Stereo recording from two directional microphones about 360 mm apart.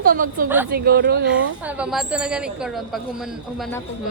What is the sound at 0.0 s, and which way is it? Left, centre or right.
Speech, right.